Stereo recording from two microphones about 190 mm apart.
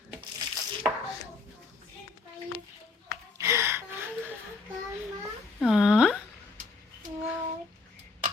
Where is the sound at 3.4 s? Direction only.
15° right (ahead or behind).